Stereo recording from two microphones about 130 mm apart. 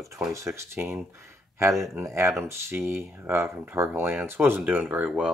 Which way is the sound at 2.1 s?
20° right (ahead or behind).